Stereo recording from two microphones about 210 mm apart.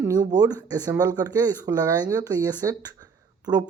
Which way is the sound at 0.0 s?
15° right (ahead or behind).